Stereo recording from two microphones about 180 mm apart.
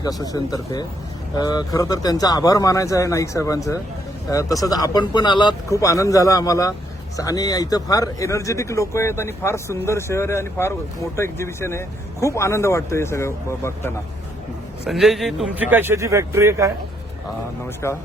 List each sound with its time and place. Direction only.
0.0 s speech: 20° left (ahead or behind)
14.8 s speech: centre (ahead or behind)
15.7 s speech: 15° right (ahead or behind)
17.8 s speech: 15° left (ahead or behind)